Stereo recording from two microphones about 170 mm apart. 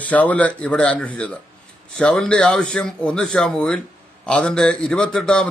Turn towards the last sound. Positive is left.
turn(degrees=5)  # may be behind; listen again after turning